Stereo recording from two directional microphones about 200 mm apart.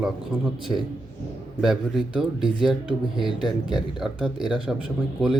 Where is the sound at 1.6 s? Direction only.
Centre (ahead or behind).